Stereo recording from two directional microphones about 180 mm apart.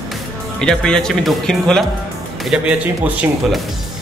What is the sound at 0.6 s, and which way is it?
A man's voice, 5° left (ahead or behind).